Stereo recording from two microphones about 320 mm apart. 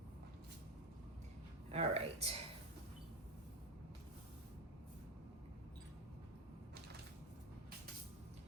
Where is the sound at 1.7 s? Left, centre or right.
Centre.